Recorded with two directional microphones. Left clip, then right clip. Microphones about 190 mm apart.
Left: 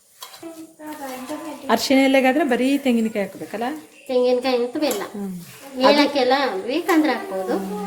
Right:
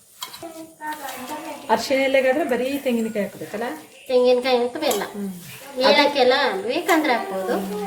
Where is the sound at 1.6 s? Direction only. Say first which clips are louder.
Left 2 dB; 45° left (ahead or behind).